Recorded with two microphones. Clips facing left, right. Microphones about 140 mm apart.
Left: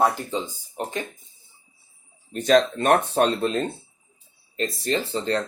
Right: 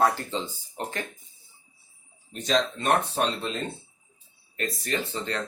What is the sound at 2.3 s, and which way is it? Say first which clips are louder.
Speech: left 7 dB; 50° left (ahead or behind).